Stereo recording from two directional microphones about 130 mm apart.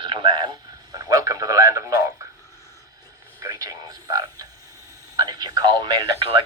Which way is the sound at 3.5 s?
25° right (ahead or behind).